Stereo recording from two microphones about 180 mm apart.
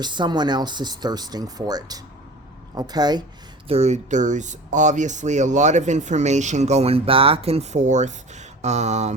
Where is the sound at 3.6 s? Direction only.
35° right (ahead or behind).